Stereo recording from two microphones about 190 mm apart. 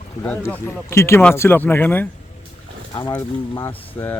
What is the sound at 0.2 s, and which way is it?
Speech, 10° left (ahead or behind).